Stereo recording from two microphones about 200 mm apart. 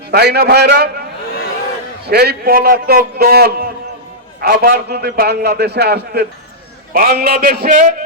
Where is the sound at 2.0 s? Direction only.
55° right (ahead or behind).